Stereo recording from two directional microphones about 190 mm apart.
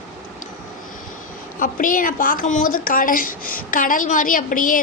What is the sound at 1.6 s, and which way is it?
A woman's voice, 45° left (ahead or behind).